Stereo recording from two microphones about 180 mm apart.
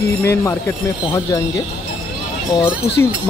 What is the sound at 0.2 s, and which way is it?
Speech, 15° left (ahead or behind).